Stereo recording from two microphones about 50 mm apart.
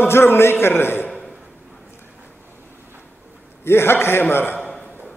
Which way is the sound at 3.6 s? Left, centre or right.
Left.